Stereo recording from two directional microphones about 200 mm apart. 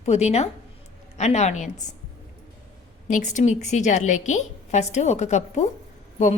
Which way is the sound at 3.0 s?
40° left (ahead or behind).